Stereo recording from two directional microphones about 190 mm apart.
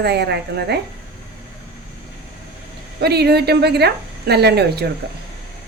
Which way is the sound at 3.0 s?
60° right (ahead or behind).